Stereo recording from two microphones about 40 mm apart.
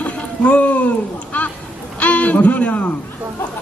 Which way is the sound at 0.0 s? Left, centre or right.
Left.